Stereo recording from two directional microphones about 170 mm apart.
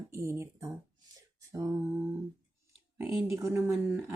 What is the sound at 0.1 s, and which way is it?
Speech, 15° right (ahead or behind).